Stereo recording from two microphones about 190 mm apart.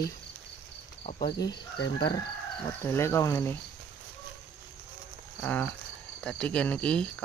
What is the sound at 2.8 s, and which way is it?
Speech, 15° left (ahead or behind).